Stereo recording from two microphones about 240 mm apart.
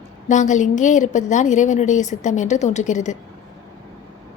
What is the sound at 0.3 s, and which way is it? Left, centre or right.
A woman's voice, left.